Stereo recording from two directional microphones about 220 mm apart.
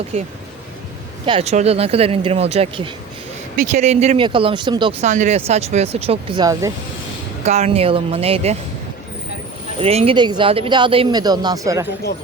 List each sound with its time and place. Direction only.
0.1 s speech: 30° right (ahead or behind); by 6.7 s 15° right (ahead or behind)
7.4 s speech: 30° right (ahead or behind)
9.8 s speech: 25° right (ahead or behind)